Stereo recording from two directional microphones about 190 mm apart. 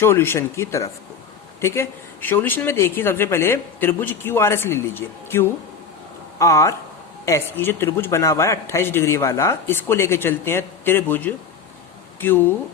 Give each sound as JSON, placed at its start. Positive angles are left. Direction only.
{"t": 0.0, "sound": "speech", "side_deg": 10}